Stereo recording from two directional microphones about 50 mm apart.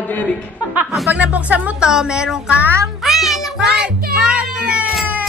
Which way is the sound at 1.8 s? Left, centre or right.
Centre.